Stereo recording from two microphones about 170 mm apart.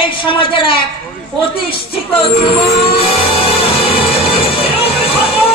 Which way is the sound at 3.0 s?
35° left (ahead or behind).